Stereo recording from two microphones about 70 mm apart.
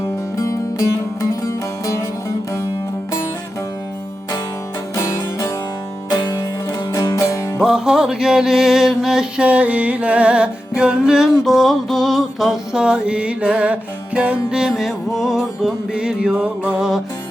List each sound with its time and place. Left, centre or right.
0.3 s music: left
4.9 s music: left
6.1 s music: left
7.6 s music: centre
9.4 s music: right